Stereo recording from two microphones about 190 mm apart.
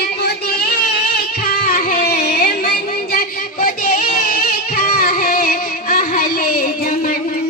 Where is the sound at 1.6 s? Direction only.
50° left (ahead or behind).